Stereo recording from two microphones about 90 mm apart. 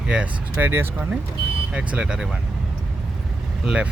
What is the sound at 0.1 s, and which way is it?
Speech, 15° right (ahead or behind).